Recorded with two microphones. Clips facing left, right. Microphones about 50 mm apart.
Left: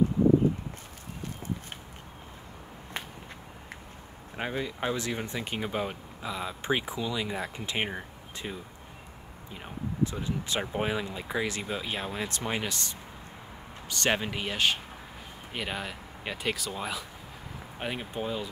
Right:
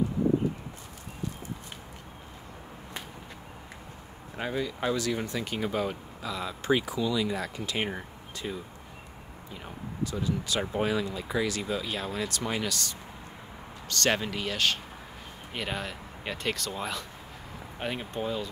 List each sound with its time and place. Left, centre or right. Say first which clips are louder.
4.4 s speech: right 1 dB; left
8.4 s speech: right 3 dB; centre
10.0 s speech: right 1 dB; left
15.5 s speech: right 1 dB; centre